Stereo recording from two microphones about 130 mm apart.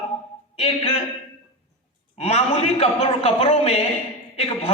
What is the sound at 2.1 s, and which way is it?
A man's voice, 55° left (ahead or behind).